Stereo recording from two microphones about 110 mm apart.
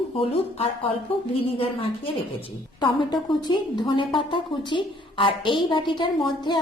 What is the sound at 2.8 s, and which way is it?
A woman's voice, 45° left (ahead or behind).